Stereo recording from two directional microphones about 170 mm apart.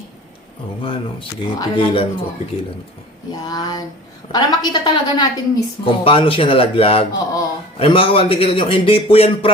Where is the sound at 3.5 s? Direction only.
25° left (ahead or behind).